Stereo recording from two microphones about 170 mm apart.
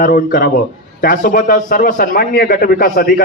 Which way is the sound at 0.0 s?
60° left (ahead or behind).